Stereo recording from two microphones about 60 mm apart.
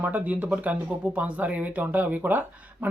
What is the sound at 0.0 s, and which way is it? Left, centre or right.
Speech, right.